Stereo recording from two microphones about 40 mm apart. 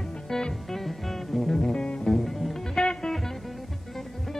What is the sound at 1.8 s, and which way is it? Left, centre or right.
Music, centre.